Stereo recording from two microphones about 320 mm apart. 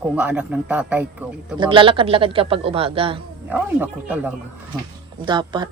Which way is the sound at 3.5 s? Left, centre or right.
Centre.